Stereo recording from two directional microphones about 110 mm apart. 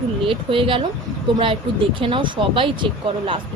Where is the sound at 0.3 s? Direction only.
55° right (ahead or behind).